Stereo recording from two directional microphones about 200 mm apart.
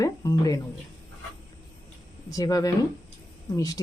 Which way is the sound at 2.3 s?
20° left (ahead or behind).